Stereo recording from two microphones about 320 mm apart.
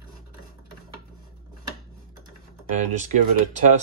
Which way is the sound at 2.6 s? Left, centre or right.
Right.